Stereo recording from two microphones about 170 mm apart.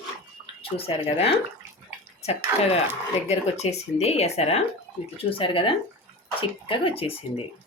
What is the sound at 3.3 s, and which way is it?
Speech, 40° left (ahead or behind).